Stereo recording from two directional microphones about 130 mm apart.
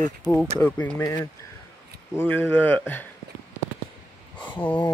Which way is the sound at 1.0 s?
25° left (ahead or behind).